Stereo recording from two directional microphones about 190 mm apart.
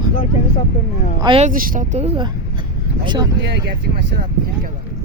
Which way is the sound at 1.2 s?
30° right (ahead or behind).